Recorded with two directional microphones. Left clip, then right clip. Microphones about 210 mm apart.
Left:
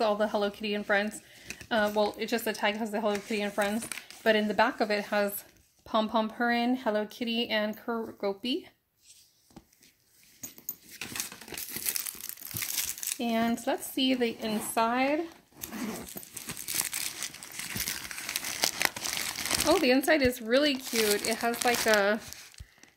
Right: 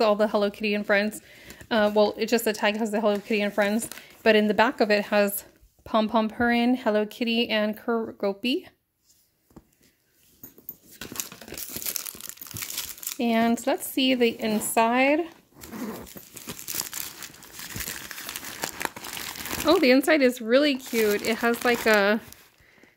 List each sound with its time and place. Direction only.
0.0 s speech: 40° right (ahead or behind)
11.1 s crumpling: 35° right (ahead or behind)
12.5 s crumpling: 15° right (ahead or behind)
13.2 s speech: 40° right (ahead or behind)
16.2 s tearing: 5° left (ahead or behind)
16.7 s crumpling: 5° right (ahead or behind)
19.6 s speech: 40° right (ahead or behind)